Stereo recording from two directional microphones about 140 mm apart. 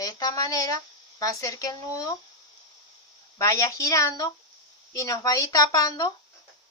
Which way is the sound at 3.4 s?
20° left (ahead or behind).